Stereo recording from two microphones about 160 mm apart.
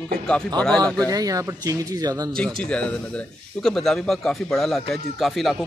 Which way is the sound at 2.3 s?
5° left (ahead or behind).